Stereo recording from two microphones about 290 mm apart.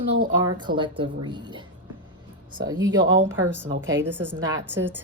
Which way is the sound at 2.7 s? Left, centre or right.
Right.